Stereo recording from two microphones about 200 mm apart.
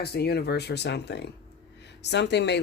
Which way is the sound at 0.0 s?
55° left (ahead or behind).